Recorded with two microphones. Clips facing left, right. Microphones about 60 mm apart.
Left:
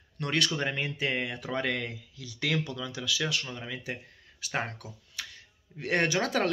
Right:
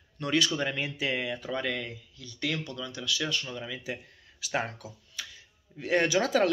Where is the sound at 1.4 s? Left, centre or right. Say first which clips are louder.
Left 1 dB; left.